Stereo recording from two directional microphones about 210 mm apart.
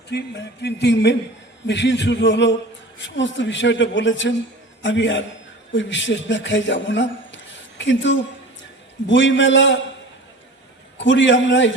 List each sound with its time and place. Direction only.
0.1 s a sound: 50° left (ahead or behind)
1.6 s a man's voice: 55° left (ahead or behind)
10.9 s a man's voice: 60° left (ahead or behind)